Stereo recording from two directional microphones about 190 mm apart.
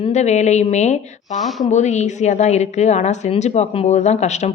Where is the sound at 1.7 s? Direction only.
40° left (ahead or behind).